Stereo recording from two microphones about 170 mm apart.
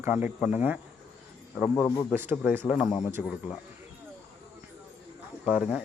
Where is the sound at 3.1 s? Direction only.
5° right (ahead or behind).